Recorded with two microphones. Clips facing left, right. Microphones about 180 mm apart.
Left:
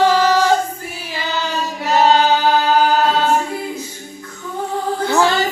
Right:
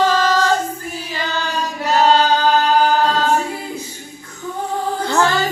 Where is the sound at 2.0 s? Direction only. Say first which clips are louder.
Left 1 dB; 20° left (ahead or behind).